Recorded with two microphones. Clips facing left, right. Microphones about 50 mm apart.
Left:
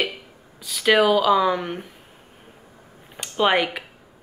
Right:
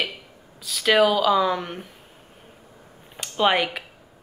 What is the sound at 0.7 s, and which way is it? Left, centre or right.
Speech, centre.